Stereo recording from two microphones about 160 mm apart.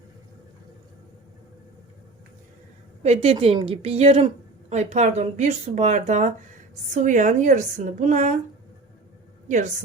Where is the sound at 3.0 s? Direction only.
40° right (ahead or behind).